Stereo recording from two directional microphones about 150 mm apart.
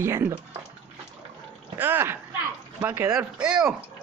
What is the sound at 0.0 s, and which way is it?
Speech, 20° right (ahead or behind).